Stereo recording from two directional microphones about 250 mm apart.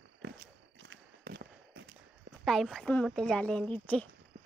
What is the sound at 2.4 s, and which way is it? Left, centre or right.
Speech, centre.